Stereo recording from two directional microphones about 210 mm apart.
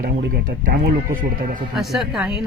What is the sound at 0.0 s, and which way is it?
Speech, 40° right (ahead or behind).